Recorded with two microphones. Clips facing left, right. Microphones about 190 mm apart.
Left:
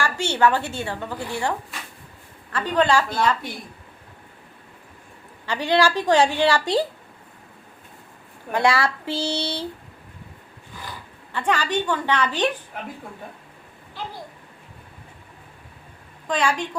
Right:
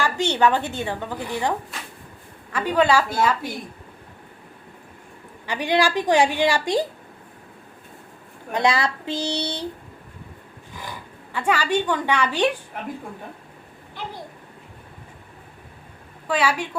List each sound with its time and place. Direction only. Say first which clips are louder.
0.0 s a woman's voice: right 1 dB; 15° right (ahead or behind)
5.5 s a woman's voice: left 1 dB; 15° right (ahead or behind)
8.5 s speech: left 1 dB; 20° right (ahead or behind)
11.3 s a woman's voice: right 2 dB; 10° right (ahead or behind)
16.2 s a woman's voice: right 1 dB; 5° right (ahead or behind)